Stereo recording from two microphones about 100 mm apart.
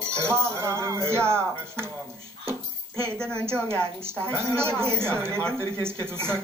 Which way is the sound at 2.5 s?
25° right (ahead or behind).